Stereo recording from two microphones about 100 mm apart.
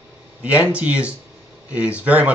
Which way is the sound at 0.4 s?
15° right (ahead or behind).